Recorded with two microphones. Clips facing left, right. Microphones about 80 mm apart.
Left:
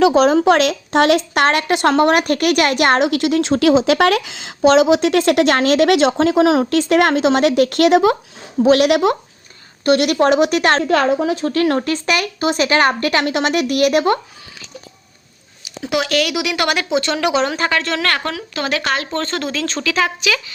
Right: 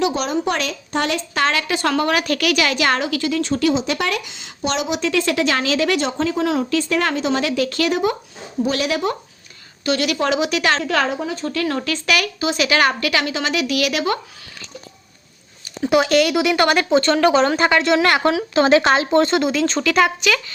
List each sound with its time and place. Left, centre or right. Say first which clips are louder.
0.3 s speech: left 8 dB; left
9.8 s a woman's voice: left 6 dB; left
11.2 s speech: left 6 dB; left
11.8 s a woman's voice: left 2 dB; left
12.4 s a woman's voice: left 3 dB; left
12.6 s a woman's voice: left 2 dB; left
13.3 s a woman's voice: left 4 dB; left
15.8 s speech: right 3 dB; centre